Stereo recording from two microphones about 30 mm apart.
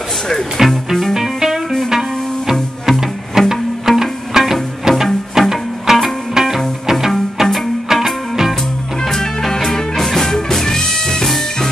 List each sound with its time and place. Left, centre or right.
0.6 s music: centre
9.0 s music: centre